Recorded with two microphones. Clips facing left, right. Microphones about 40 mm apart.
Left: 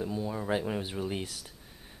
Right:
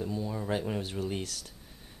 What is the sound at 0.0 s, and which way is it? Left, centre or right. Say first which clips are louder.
Speech: left 1 dB; centre.